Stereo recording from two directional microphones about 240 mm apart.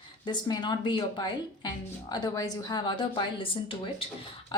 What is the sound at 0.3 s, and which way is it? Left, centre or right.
A woman's voice, centre.